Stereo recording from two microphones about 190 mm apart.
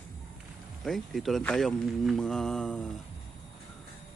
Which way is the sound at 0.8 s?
Centre (ahead or behind).